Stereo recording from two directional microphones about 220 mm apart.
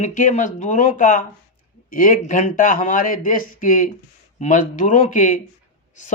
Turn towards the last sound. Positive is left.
turn(degrees=35)  # may be behind; listen again after turning